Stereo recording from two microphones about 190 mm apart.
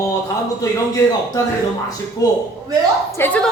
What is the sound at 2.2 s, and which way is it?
A woman's voice, 15° left (ahead or behind).